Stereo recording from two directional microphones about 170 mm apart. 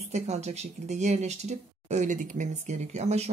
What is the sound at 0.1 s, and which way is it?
Speech, 40° right (ahead or behind).